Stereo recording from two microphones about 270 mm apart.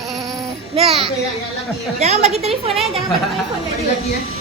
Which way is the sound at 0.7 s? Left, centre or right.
Right.